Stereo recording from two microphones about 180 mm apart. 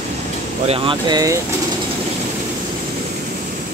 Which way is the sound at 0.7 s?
30° right (ahead or behind).